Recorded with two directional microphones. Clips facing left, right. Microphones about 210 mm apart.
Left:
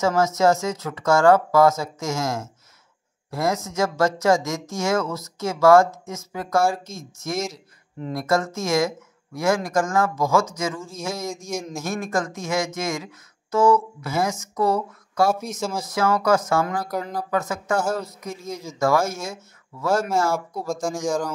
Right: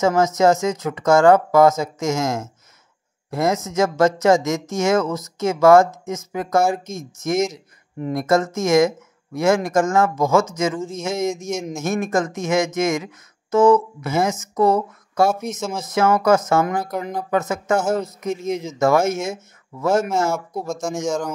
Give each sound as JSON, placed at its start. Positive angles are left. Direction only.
{"t": 0.0, "sound": "speech", "side_deg": -20}